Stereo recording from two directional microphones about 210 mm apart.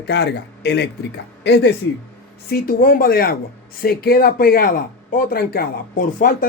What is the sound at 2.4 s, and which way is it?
Speech, 45° left (ahead or behind).